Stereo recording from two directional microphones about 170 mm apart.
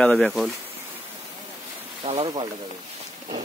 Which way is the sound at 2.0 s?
35° right (ahead or behind).